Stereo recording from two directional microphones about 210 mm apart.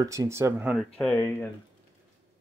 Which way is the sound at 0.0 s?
15° right (ahead or behind).